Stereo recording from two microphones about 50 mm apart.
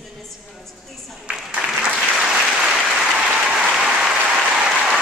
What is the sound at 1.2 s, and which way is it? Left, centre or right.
Applause, centre.